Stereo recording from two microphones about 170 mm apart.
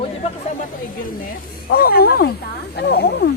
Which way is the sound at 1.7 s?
65° left (ahead or behind).